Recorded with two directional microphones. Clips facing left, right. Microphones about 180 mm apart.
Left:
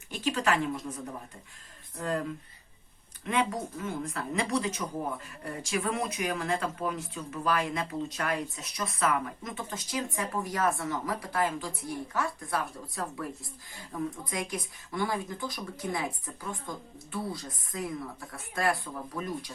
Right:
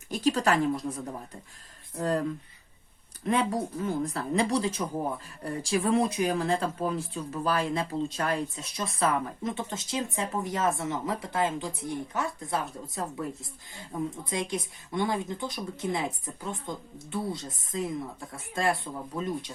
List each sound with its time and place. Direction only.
0.1 s a woman's voice: 35° right (ahead or behind)
2.0 s speech: 35° right (ahead or behind)
3.2 s speech: 35° right (ahead or behind)